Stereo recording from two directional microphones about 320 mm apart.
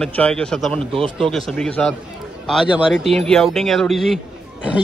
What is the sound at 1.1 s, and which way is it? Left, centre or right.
A man's voice, centre.